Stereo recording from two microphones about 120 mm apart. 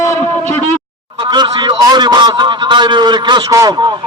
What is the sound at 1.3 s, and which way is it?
A man's voice, 40° right (ahead or behind).